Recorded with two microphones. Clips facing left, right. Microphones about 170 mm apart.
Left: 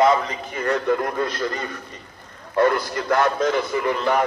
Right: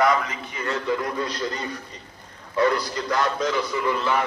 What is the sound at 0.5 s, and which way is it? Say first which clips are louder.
A man's voice: left 5 dB; 55° left (ahead or behind).